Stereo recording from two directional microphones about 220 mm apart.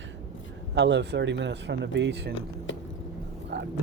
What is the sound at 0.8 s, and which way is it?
Speech, 50° right (ahead or behind).